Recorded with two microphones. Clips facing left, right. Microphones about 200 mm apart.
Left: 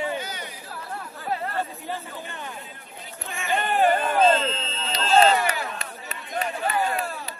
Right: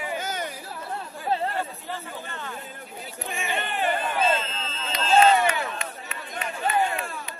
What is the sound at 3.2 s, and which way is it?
Speech, 15° right (ahead or behind).